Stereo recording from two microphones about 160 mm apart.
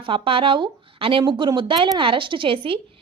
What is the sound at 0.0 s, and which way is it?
A woman's voice, 35° right (ahead or behind).